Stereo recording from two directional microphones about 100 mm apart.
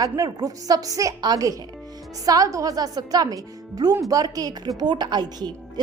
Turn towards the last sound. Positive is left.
turn(degrees=-45)  # may be behind; listen again after turning